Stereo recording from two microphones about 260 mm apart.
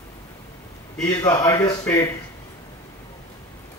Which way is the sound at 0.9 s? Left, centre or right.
Centre.